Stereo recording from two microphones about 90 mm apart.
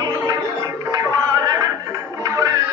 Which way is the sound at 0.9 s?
45° right (ahead or behind).